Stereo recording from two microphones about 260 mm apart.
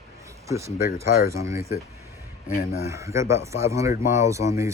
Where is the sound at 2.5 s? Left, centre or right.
Left.